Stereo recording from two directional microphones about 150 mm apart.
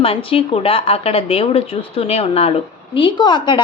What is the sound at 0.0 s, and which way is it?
Speech, 40° left (ahead or behind).